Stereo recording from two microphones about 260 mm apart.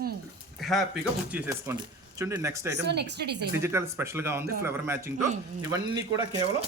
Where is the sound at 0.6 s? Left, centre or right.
Centre.